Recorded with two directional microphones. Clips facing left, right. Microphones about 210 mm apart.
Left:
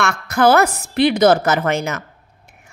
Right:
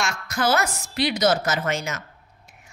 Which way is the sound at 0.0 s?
60° left (ahead or behind).